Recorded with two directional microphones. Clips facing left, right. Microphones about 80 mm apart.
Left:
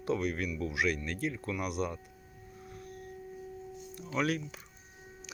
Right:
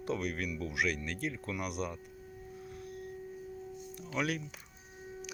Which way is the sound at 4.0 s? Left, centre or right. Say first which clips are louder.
Left 3 dB; centre.